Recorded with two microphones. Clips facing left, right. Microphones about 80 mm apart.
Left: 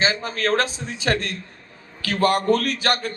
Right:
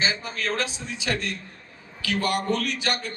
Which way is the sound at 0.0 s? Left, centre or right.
Left.